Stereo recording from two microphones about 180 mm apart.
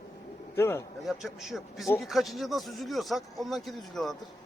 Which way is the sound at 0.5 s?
15° left (ahead or behind).